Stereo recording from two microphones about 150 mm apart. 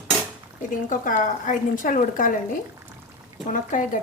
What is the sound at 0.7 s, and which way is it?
A woman's voice, 60° left (ahead or behind).